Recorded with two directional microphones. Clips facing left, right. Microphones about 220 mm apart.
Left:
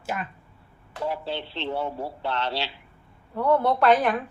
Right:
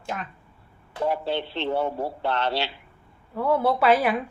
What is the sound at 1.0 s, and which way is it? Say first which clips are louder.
Speech: right 4 dB; 55° right (ahead or behind).